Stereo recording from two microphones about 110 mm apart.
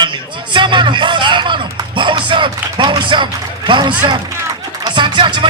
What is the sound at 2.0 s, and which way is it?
Music, 45° right (ahead or behind).